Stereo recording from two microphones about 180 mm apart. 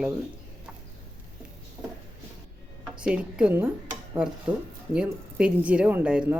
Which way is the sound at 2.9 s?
5° right (ahead or behind).